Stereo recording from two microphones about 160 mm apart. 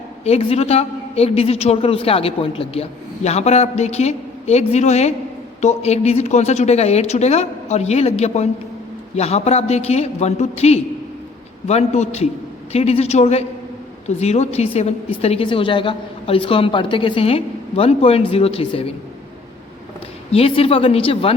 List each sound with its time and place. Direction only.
0.3 s a woman's voice: 40° left (ahead or behind)
20.3 s a woman's voice: 40° left (ahead or behind)